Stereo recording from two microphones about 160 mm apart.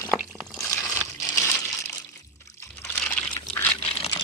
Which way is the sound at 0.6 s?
20° left (ahead or behind).